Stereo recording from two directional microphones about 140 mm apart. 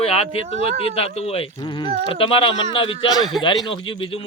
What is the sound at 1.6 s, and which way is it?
Speech, 30° left (ahead or behind).